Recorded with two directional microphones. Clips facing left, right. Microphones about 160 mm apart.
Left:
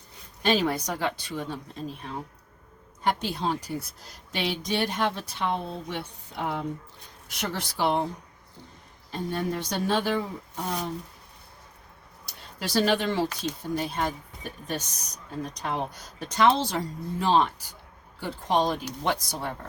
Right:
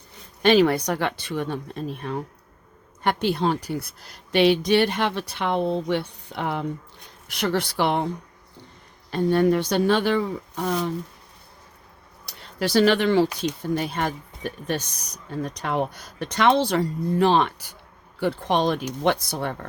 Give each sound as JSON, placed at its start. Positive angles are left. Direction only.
{"t": 0.4, "sound": "a woman's voice", "side_deg": -70}
{"t": 9.0, "sound": "a woman's voice", "side_deg": -75}
{"t": 12.2, "sound": "a woman's voice", "side_deg": -65}